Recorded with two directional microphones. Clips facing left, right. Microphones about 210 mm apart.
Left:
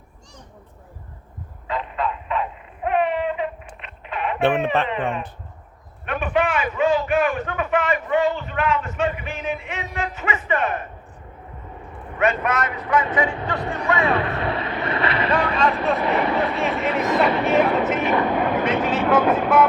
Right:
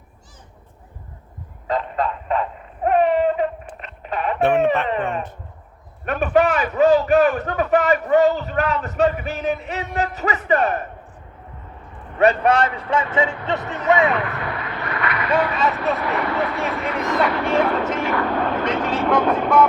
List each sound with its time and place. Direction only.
1.6 s a sound: 40° right (ahead or behind)
4.4 s speech: 30° left (ahead or behind)
6.1 s a man's voice: 40° right (ahead or behind)
12.2 s speech: 35° right (ahead or behind)
14.1 s vehicle: 30° left (ahead or behind)
15.3 s speech: 5° right (ahead or behind)
16.0 s speech: 15° left (ahead or behind)
17.4 s speech: 5° left (ahead or behind)
18.0 s speech: 20° left (ahead or behind)